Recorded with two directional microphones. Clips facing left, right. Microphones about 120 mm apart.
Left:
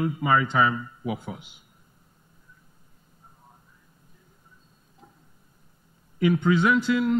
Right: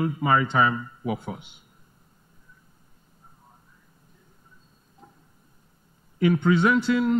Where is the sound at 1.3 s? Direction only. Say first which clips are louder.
Right 2 dB; centre (ahead or behind).